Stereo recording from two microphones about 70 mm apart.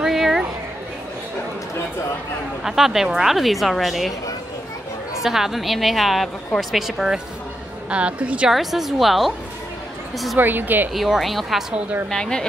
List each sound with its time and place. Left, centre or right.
0.0 s a sound: centre
2.6 s a woman's voice: centre
5.2 s a woman's voice: centre
7.9 s a woman's voice: centre
8.5 s a woman's voice: centre
10.4 s a woman's voice: right
10.9 s a woman's voice: centre